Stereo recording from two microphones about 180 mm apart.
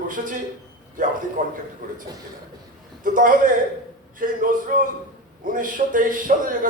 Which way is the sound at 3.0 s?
50° right (ahead or behind).